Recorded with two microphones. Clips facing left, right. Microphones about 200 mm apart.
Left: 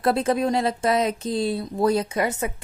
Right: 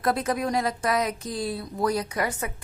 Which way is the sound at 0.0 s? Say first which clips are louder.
Left 4 dB; 30° left (ahead or behind).